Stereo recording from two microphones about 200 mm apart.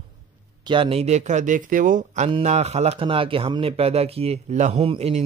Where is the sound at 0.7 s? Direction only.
25° right (ahead or behind).